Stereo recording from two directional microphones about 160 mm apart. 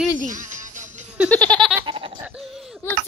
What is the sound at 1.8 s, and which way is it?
Laughter, 30° right (ahead or behind).